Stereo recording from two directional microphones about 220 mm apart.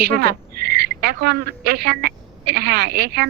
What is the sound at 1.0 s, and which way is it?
A woman's voice, 45° right (ahead or behind).